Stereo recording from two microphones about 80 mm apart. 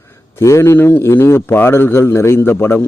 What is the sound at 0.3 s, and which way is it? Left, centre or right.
A man's voice, left.